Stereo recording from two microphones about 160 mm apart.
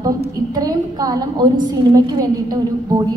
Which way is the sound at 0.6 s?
25° right (ahead or behind).